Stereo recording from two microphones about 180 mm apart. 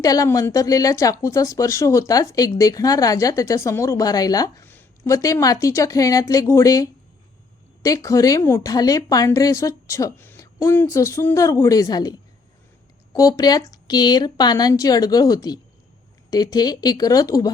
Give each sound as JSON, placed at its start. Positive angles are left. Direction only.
{"t": 0.0, "sound": "speech", "side_deg": 20}
{"t": 13.1, "sound": "speech", "side_deg": 20}